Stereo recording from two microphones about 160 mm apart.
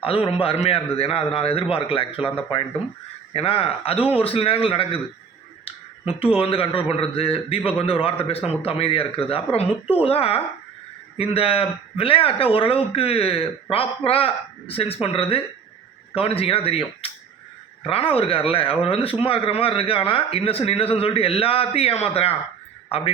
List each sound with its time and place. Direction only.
0.0 s a man's voice: 35° left (ahead or behind)